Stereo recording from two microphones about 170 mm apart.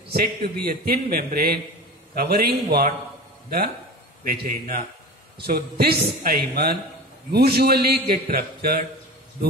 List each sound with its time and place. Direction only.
0.1 s a man's voice: 65° right (ahead or behind)
4.2 s a man's voice: 55° right (ahead or behind)